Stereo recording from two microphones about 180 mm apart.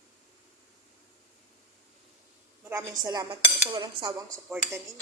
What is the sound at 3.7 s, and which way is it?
Dishes, 20° right (ahead or behind).